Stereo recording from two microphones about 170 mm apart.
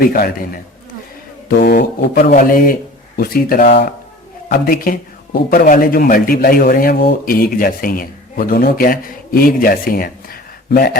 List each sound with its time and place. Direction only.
0.0 s a man's voice: 55° left (ahead or behind)